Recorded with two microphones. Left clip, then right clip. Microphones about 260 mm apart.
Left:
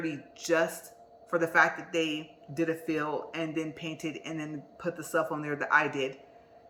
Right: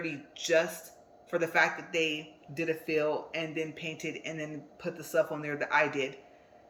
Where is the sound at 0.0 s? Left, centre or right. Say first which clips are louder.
Even; centre.